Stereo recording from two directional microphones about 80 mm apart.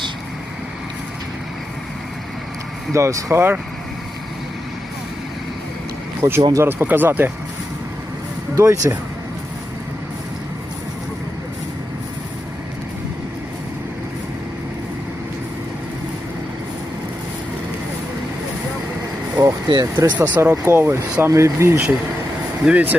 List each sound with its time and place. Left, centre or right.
2.9 s speech: right
3.3 s speech: right
6.2 s speech: right
8.5 s speech: right
19.4 s speech: right
20.1 s speech: right
22.6 s speech: centre